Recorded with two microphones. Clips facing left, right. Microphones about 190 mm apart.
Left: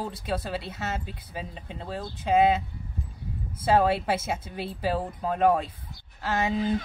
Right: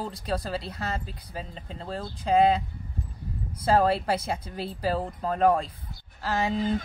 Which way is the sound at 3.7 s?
Centre (ahead or behind).